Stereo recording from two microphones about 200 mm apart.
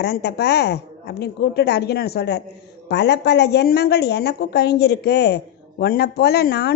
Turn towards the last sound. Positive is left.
turn(degrees=55)  # may be behind; listen again after turning